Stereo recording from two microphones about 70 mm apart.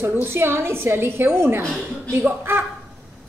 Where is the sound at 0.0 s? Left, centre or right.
Right.